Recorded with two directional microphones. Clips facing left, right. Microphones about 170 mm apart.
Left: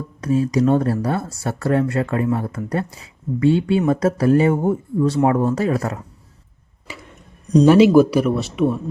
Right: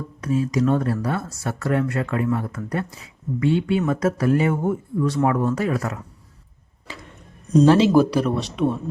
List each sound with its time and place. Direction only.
0.2 s speech: 35° left (ahead or behind)
7.6 s speech: 10° left (ahead or behind)